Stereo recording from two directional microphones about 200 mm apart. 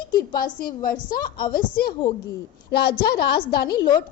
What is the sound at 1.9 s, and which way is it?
Speech, 25° left (ahead or behind).